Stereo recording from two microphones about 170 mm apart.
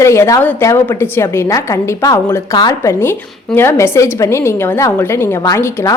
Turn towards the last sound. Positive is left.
turn(degrees=15)  # may be behind; listen again after turning